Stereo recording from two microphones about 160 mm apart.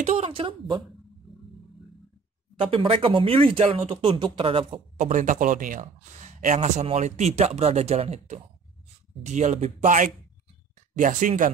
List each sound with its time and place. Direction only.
0.0 s speech: 40° right (ahead or behind)
2.6 s speech: 35° right (ahead or behind)
4.9 s speech: 50° right (ahead or behind)